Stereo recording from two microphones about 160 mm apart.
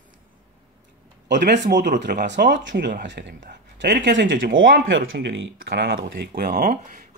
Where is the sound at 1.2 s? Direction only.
90° right.